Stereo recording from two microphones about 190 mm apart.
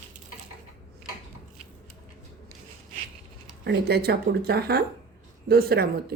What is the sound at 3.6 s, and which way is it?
Speech, 60° right (ahead or behind).